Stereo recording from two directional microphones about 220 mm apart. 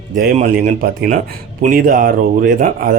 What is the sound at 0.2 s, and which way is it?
A man's voice, 45° right (ahead or behind).